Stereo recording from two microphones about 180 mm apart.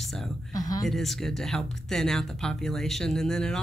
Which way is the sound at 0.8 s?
Centre (ahead or behind).